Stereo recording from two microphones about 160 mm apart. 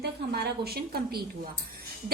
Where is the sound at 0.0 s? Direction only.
85° right.